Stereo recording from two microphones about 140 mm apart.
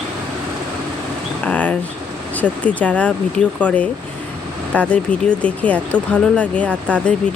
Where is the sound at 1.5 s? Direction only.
10° left (ahead or behind).